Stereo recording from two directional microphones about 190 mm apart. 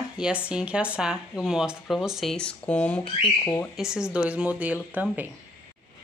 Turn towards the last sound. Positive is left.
turn(degrees=-10)  # may be behind; listen again after turning